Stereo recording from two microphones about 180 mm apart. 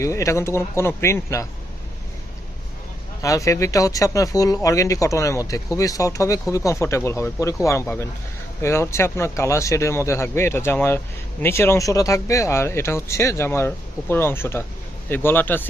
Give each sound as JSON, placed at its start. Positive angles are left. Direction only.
{"t": 0.0, "sound": "speech", "side_deg": 15}
{"t": 3.2, "sound": "speech", "side_deg": 20}